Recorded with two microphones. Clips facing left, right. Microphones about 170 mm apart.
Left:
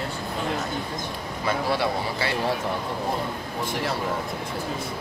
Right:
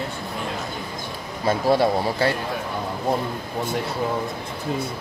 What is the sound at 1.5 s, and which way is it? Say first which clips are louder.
Speech: right 6 dB; 40° right (ahead or behind).